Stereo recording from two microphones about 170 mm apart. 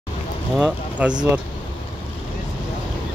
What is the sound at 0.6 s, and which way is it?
Speech, 10° right (ahead or behind).